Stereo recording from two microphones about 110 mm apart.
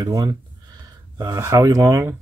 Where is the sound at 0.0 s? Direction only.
35° right (ahead or behind).